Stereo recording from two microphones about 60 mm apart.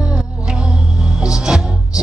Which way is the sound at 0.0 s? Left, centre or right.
Centre.